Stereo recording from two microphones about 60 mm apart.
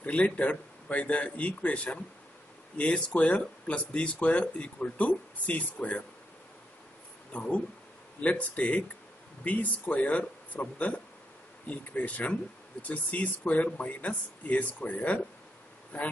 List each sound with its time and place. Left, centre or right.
0.0 s speech: left
7.3 s speech: left